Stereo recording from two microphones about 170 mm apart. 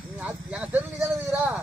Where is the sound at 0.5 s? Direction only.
5° right (ahead or behind).